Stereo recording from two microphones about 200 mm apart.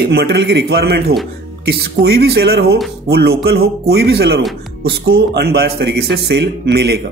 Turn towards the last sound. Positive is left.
turn(degrees=-55)  # may be behind; listen again after turning